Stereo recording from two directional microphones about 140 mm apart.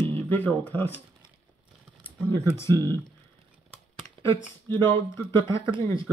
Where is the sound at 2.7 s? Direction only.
25° right (ahead or behind).